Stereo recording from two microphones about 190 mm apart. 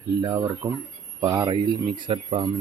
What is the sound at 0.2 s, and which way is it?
Speech, 20° right (ahead or behind).